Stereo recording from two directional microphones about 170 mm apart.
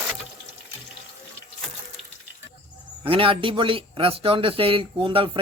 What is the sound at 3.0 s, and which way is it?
Speech, 30° right (ahead or behind).